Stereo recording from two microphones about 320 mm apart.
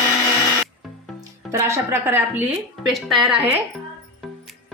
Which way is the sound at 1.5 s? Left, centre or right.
Centre.